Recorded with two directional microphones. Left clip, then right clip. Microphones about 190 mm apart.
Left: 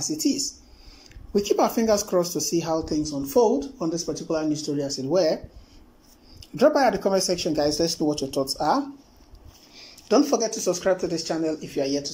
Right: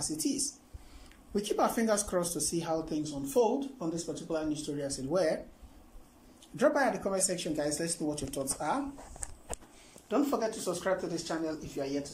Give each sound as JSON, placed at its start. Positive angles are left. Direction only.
{"t": 0.2, "sound": "speech", "side_deg": 10}
{"t": 6.5, "sound": "speech", "side_deg": 10}
{"t": 10.0, "sound": "speech", "side_deg": 15}